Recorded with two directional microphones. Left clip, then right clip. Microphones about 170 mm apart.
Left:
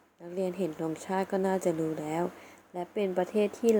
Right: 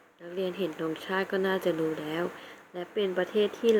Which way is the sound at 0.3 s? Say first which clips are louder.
Right 1 dB; 25° left (ahead or behind).